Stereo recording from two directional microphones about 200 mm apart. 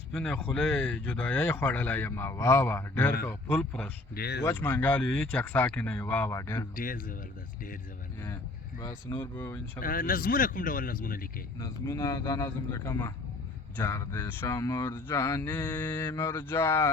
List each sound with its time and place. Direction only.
0.1 s speech: 5° left (ahead or behind)
4.1 s speech: 55° left (ahead or behind)
4.4 s speech: 10° left (ahead or behind)
6.7 s speech: 45° left (ahead or behind)
8.8 s speech: 15° left (ahead or behind)
9.8 s speech: 45° left (ahead or behind)
11.6 s speech: 15° left (ahead or behind)